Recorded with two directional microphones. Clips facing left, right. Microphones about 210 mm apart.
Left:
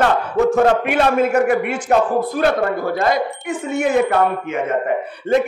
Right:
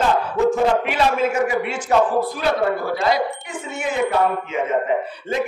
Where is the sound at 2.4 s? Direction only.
50° left (ahead or behind).